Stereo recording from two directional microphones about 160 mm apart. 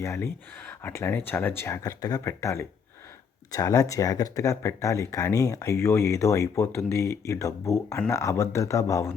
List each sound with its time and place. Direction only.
0.0 s speech: 15° left (ahead or behind)